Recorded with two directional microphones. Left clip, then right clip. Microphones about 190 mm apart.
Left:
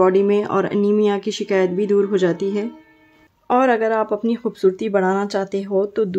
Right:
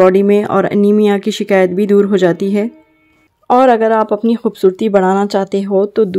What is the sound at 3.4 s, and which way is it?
Speech, 30° right (ahead or behind).